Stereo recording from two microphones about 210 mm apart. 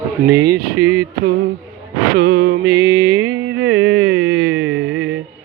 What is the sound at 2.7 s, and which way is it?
Mantra, 15° right (ahead or behind).